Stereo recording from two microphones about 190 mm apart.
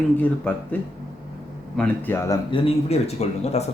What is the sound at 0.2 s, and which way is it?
Speech, 10° left (ahead or behind).